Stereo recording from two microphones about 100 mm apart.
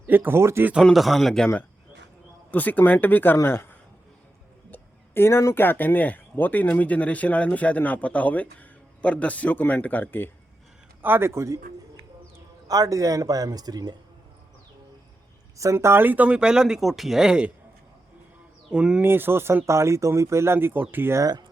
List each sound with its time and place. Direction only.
0.1 s speech: 20° right (ahead or behind)
0.9 s speech: centre (ahead or behind)
2.5 s speech: 15° left (ahead or behind)
11.0 s speech: 25° right (ahead or behind)
12.6 s speech: 35° right (ahead or behind)
15.5 s speech: 30° right (ahead or behind); by 17.5 s 10° right (ahead or behind)
18.7 s speech: 10° right (ahead or behind)
19.0 s speech: 20° right (ahead or behind)
21.2 s speech: 40° right (ahead or behind)